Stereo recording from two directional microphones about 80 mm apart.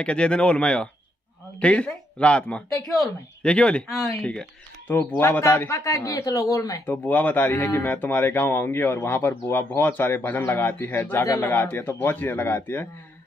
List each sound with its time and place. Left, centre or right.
0.0 s speech: centre
5.4 s speech: left
6.9 s speech: left
11.2 s speech: left
11.5 s speech: left